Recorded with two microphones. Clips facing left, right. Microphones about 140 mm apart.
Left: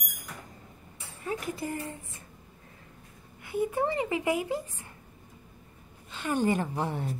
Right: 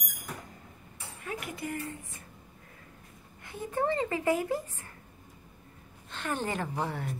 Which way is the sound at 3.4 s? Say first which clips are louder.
Left 2 dB; 10° left (ahead or behind).